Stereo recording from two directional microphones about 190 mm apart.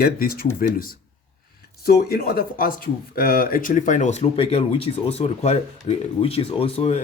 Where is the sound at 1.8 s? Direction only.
55° left (ahead or behind); by 7.0 s 30° left (ahead or behind).